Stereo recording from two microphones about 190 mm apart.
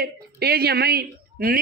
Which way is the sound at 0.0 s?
55° right (ahead or behind).